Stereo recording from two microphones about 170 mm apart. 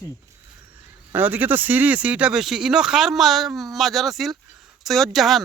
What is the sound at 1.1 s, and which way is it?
Speech, 10° right (ahead or behind).